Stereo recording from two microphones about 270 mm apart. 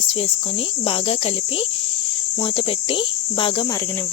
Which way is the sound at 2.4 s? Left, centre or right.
Centre.